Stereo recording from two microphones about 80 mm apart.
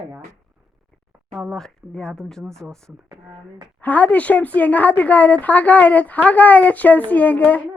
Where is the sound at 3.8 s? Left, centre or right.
Centre.